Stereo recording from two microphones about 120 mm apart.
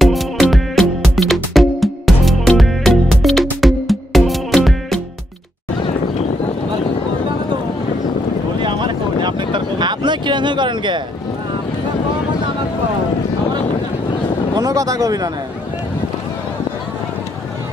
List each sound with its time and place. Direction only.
0.0 s music: centre (ahead or behind)
8.5 s a sound: 40° right (ahead or behind)
14.6 s speech: 30° right (ahead or behind)